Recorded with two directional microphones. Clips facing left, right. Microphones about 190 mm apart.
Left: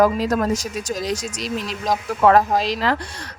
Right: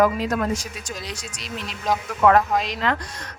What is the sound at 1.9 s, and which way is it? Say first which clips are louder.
Speech: left 2 dB; 35° left (ahead or behind).